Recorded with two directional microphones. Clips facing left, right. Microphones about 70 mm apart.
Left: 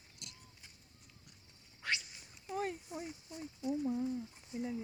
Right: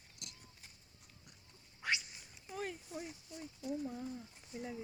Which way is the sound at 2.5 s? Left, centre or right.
Left.